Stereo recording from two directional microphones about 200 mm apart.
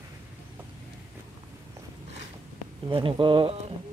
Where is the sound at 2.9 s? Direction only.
25° right (ahead or behind).